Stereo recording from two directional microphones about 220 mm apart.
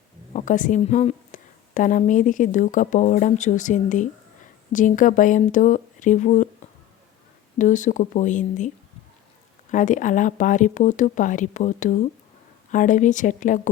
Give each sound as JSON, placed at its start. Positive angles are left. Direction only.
{"t": 0.3, "sound": "a woman's voice", "side_deg": 35}
{"t": 7.6, "sound": "a woman's voice", "side_deg": 35}
{"t": 9.7, "sound": "a woman's voice", "side_deg": 35}